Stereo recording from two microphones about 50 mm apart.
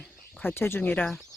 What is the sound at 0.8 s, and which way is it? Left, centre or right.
Speech, left.